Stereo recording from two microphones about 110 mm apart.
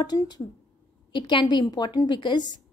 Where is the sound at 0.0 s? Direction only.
40° left (ahead or behind).